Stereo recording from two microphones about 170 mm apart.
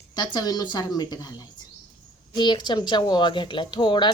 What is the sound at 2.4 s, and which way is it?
A woman's voice, 25° left (ahead or behind).